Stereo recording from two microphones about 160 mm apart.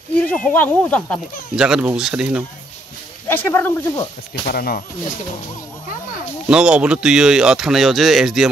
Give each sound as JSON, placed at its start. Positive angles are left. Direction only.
{"t": 0.2, "sound": "speech", "side_deg": 10}
{"t": 1.6, "sound": "speech", "side_deg": -5}
{"t": 3.3, "sound": "speech", "side_deg": 15}
{"t": 4.5, "sound": "speech", "side_deg": 70}
{"t": 6.5, "sound": "speech", "side_deg": -5}